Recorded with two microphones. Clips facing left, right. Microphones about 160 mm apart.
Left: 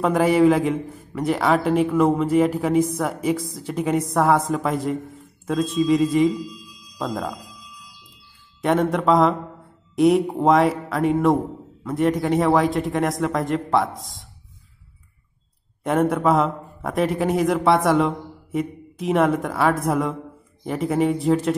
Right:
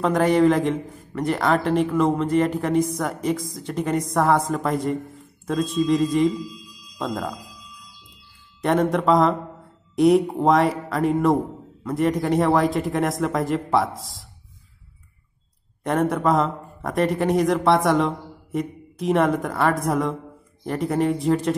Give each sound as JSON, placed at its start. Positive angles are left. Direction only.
{"t": 0.0, "sound": "a man's voice", "side_deg": 5}
{"t": 8.5, "sound": "a man's voice", "side_deg": 0}
{"t": 15.8, "sound": "a man's voice", "side_deg": 0}